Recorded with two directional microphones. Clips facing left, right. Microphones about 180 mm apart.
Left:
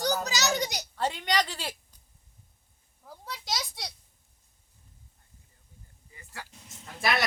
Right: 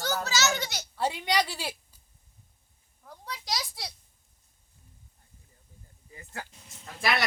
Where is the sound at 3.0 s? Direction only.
5° left (ahead or behind).